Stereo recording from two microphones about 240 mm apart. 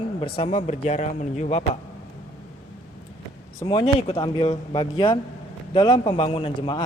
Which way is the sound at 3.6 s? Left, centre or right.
Centre.